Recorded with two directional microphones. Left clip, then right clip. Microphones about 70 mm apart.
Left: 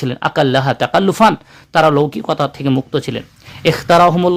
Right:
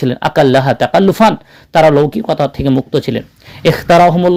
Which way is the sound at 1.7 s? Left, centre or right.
Centre.